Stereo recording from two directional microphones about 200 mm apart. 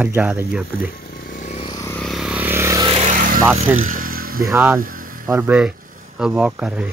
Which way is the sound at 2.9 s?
40° right (ahead or behind).